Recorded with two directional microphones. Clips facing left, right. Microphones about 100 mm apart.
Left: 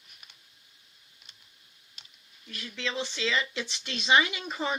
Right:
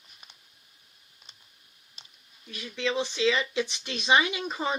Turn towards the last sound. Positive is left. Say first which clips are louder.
# right 2 dB
turn(degrees=-20)  # may be behind; listen again after turning